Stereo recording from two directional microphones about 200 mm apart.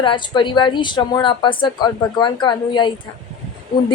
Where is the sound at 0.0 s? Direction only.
25° left (ahead or behind).